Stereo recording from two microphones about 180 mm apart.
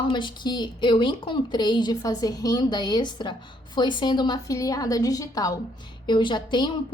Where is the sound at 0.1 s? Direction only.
25° left (ahead or behind).